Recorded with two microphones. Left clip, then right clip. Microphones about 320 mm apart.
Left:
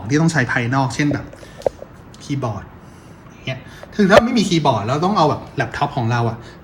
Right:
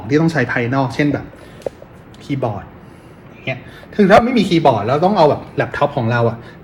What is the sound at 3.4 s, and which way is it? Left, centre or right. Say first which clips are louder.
Speech: right 4 dB; centre.